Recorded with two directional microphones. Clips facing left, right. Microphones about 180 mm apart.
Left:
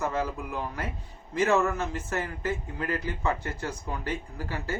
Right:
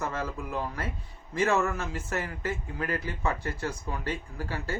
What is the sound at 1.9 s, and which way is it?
Speech, 20° left (ahead or behind).